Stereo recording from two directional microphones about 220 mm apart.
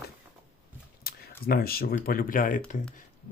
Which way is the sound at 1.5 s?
45° left (ahead or behind).